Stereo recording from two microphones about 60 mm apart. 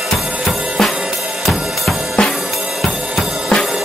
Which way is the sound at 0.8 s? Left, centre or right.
Centre.